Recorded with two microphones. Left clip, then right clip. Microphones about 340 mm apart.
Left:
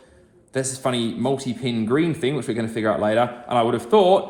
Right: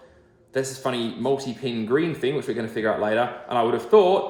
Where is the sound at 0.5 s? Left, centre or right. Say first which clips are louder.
Left 2 dB; centre.